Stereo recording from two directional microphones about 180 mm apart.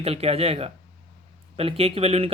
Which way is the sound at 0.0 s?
35° right (ahead or behind).